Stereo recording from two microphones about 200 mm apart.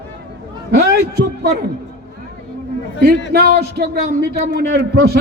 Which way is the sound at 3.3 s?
50° right (ahead or behind).